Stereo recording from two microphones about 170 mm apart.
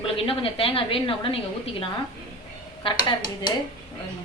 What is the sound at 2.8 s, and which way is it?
Speech, 25° left (ahead or behind).